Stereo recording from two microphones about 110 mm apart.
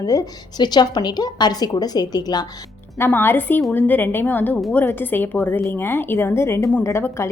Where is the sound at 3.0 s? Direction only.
20° left (ahead or behind).